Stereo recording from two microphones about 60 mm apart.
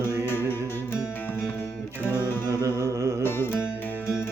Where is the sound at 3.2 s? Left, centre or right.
Left.